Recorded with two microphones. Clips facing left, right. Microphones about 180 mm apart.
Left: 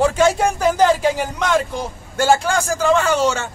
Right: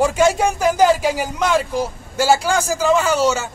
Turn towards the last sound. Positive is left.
turn(degrees=-5)  # may be behind; listen again after turning